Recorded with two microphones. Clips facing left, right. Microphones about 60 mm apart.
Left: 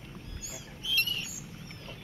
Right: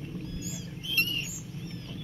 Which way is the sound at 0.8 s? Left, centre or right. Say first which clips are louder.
Right 1 dB; right.